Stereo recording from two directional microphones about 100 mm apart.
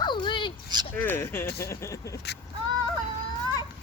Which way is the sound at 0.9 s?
20° left (ahead or behind).